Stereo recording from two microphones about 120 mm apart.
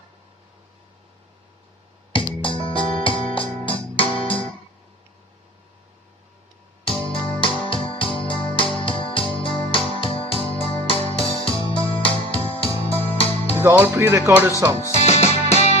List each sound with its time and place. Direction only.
2.1 s music: 45° left (ahead or behind)
6.8 s music: 45° left (ahead or behind)
13.6 s speech: 20° right (ahead or behind)
14.9 s music: 60° left (ahead or behind)